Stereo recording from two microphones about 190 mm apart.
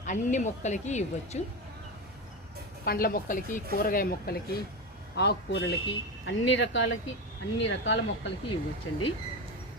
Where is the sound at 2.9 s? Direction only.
50° left (ahead or behind).